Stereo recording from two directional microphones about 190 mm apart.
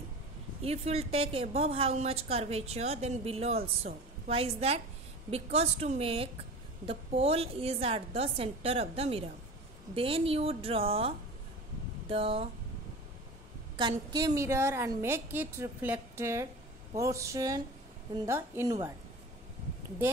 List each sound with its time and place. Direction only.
0.6 s a woman's voice: 35° right (ahead or behind)
13.7 s a woman's voice: 20° right (ahead or behind)